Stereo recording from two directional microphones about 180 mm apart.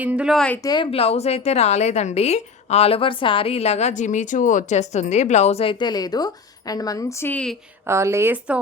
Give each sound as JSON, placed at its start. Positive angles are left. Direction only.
{"t": 0.0, "sound": "speech", "side_deg": -5}
{"t": 0.6, "sound": "a woman's voice", "side_deg": 25}
{"t": 7.9, "sound": "speech", "side_deg": -15}